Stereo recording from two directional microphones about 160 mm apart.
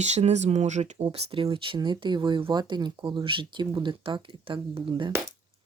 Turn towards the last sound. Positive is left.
turn(degrees=-30)  # may be behind; listen again after turning